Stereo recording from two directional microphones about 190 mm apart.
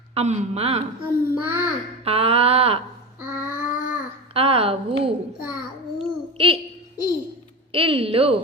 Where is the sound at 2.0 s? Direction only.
30° right (ahead or behind).